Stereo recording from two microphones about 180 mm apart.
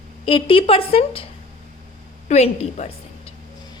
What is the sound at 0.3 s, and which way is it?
A woman's voice, 30° left (ahead or behind).